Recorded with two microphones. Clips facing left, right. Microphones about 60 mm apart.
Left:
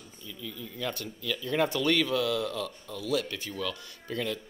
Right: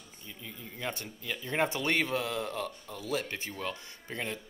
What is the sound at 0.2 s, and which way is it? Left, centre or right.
Speech, right.